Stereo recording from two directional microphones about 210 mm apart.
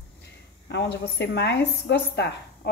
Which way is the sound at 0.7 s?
50° left (ahead or behind).